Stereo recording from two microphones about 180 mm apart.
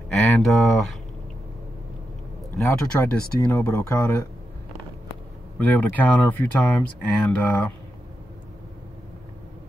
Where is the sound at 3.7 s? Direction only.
15° left (ahead or behind).